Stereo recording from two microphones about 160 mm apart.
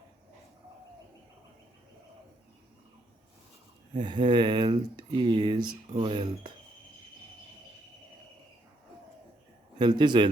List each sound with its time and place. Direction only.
3.9 s speech: 30° right (ahead or behind)
9.7 s speech: 30° right (ahead or behind)